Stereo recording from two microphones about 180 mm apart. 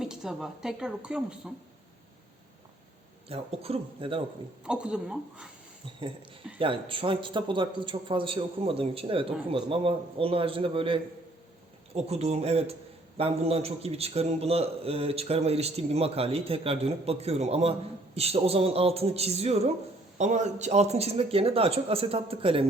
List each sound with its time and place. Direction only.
0.0 s speech: 5° right (ahead or behind)
3.2 s a man's voice: 35° right (ahead or behind)
4.6 s speech: 5° right (ahead or behind)
6.6 s a man's voice: 30° right (ahead or behind)